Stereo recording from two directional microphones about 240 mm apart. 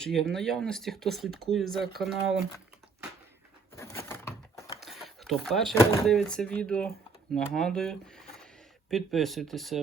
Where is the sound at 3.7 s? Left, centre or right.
Centre.